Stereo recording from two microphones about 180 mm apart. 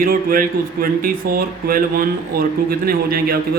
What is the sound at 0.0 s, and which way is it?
Speech, 50° right (ahead or behind).